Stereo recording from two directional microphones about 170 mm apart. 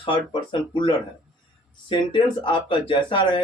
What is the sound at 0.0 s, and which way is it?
Speech, 30° left (ahead or behind).